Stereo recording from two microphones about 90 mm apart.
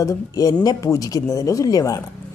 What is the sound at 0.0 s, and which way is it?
A woman's voice, 40° left (ahead or behind).